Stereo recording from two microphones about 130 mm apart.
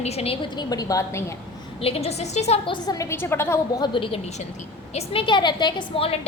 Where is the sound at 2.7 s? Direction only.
30° left (ahead or behind).